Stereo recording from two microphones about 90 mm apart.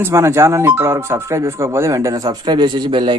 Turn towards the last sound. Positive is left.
turn(degrees=-65)  # may be behind; listen again after turning